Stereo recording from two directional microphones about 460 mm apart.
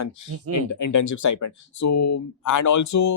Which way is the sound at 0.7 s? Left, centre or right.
Left.